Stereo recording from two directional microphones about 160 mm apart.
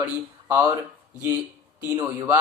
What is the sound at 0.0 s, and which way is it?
Speech, 10° right (ahead or behind).